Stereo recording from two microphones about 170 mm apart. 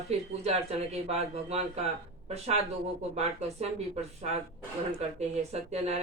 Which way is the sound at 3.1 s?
40° right (ahead or behind).